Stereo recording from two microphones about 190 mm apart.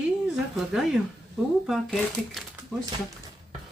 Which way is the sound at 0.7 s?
Centre (ahead or behind).